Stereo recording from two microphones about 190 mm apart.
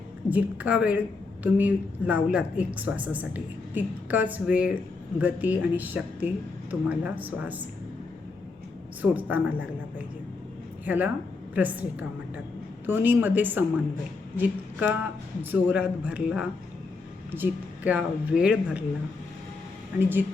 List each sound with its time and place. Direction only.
0.3 s speech: 5° right (ahead or behind)
9.0 s speech: 10° right (ahead or behind)
10.8 s speech: 10° right (ahead or behind)
20.0 s speech: 10° right (ahead or behind)